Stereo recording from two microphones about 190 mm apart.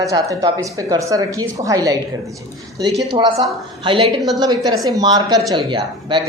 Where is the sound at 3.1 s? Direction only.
25° right (ahead or behind).